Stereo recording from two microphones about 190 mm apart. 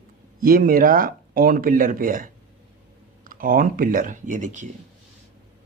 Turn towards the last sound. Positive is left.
turn(degrees=-40)  # may be behind; listen again after turning